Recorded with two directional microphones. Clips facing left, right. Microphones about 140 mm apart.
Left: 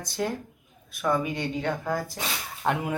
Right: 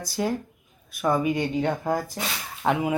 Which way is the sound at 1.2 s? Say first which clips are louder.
Right 5 dB; 20° right (ahead or behind).